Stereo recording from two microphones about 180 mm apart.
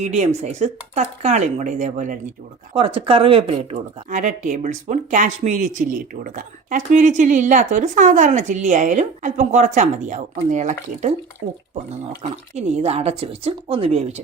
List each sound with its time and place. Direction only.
0.0 s speech: 40° right (ahead or behind)
2.7 s speech: 30° right (ahead or behind)
12.2 s speech: 40° right (ahead or behind)